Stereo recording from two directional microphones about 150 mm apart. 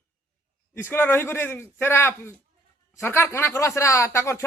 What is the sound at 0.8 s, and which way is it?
A man's voice, 15° left (ahead or behind).